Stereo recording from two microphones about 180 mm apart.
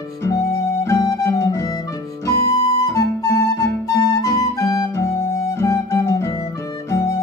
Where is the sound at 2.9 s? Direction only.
15° left (ahead or behind).